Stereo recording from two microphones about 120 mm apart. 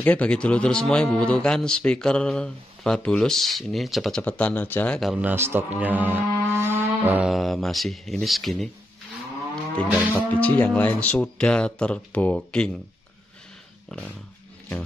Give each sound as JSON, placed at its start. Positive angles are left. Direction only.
{"t": 0.0, "sound": "speech", "side_deg": 10}
{"t": 4.2, "sound": "speech", "side_deg": 10}
{"t": 5.1, "sound": "speech", "side_deg": -15}
{"t": 7.2, "sound": "speech", "side_deg": 0}
{"t": 9.8, "sound": "speech", "side_deg": -15}
{"t": 10.1, "sound": "speech", "side_deg": 15}
{"t": 13.8, "sound": "dog", "side_deg": 10}